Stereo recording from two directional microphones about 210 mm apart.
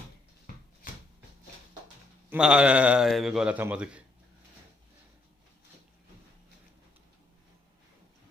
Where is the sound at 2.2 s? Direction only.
5° right (ahead or behind).